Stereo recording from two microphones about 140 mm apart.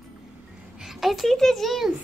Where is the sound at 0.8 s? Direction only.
Centre (ahead or behind).